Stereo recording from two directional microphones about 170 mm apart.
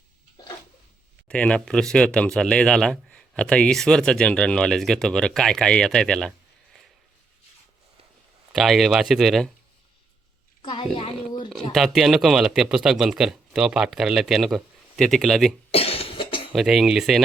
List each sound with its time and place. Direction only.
1.3 s speech: 5° left (ahead or behind)
8.5 s speech: centre (ahead or behind)
10.6 s a sound: 30° left (ahead or behind)
11.7 s speech: centre (ahead or behind)
15.7 s cough: 35° left (ahead or behind)
16.5 s speech: centre (ahead or behind)